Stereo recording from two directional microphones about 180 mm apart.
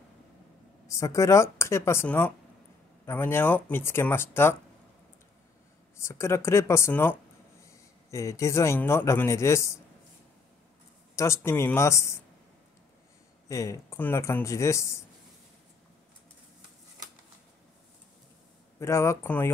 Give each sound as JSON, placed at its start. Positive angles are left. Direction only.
{"t": 0.8, "sound": "speech", "side_deg": 15}
{"t": 5.9, "sound": "speech", "side_deg": 15}
{"t": 11.1, "sound": "speech", "side_deg": 15}
{"t": 13.5, "sound": "speech", "side_deg": 15}
{"t": 18.8, "sound": "speech", "side_deg": 15}